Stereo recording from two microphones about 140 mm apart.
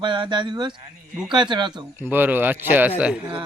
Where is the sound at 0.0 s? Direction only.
35° right (ahead or behind).